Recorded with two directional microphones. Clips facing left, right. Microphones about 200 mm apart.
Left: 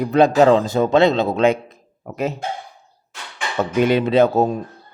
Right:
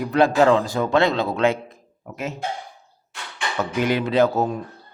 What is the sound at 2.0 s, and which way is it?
Speech, 40° left (ahead or behind).